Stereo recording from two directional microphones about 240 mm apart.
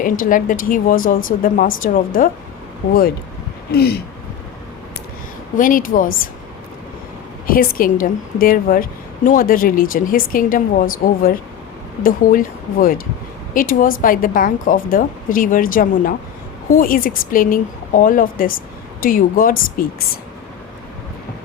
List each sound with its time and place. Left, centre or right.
0.0 s a woman's voice: left
3.7 s a woman's voice: left
5.5 s a woman's voice: left
7.4 s a woman's voice: left